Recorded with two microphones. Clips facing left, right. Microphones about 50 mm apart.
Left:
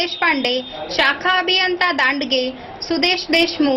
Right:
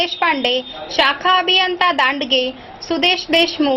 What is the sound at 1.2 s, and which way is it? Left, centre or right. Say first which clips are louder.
A woman's voice: right 2 dB; right.